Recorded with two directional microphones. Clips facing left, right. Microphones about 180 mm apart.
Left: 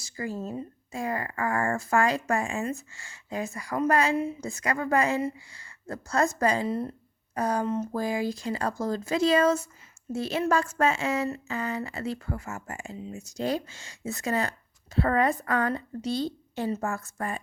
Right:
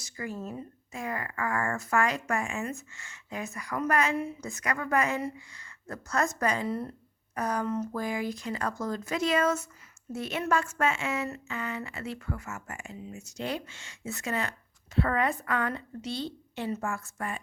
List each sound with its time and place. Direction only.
0.0 s speech: 30° left (ahead or behind)